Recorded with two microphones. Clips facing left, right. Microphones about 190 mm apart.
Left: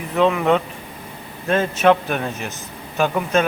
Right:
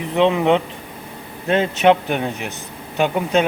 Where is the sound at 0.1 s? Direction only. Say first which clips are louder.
Right 1 dB; 20° right (ahead or behind).